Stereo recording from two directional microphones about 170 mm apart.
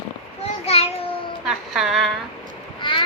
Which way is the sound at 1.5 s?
Centre (ahead or behind).